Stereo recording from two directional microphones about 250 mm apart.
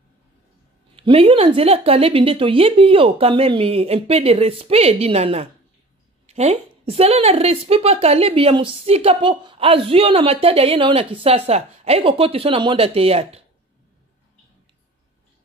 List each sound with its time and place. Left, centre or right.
0.9 s speech: right